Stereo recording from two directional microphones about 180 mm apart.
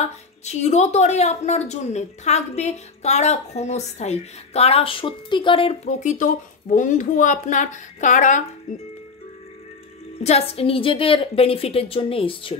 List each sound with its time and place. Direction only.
0.5 s a woman's voice: 40° left (ahead or behind)
10.2 s a woman's voice: 35° left (ahead or behind)